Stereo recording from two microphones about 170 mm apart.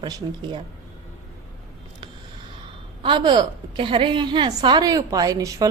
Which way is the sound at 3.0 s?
30° right (ahead or behind).